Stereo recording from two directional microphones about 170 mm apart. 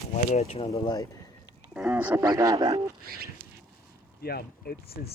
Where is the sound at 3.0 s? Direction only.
60° right (ahead or behind).